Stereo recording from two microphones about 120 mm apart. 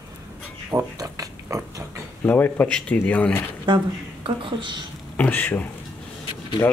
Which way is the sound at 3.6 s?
40° right (ahead or behind).